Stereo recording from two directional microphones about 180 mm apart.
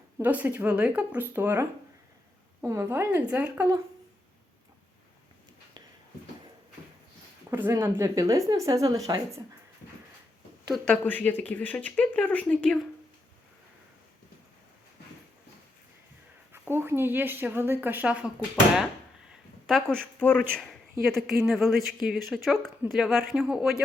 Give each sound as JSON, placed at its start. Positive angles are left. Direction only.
{"t": 0.2, "sound": "a woman's voice", "side_deg": -10}
{"t": 7.5, "sound": "speech", "side_deg": -10}
{"t": 10.7, "sound": "speech", "side_deg": 5}
{"t": 16.5, "sound": "a woman's voice", "side_deg": -10}
{"t": 19.6, "sound": "speech", "side_deg": 5}